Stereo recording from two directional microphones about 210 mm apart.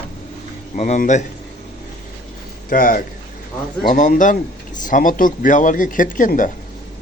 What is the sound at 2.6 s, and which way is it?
Speech, 40° left (ahead or behind).